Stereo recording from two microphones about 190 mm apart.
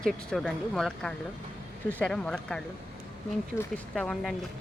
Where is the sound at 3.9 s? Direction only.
5° left (ahead or behind).